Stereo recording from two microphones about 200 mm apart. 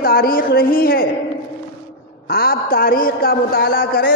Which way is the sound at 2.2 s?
50° left (ahead or behind).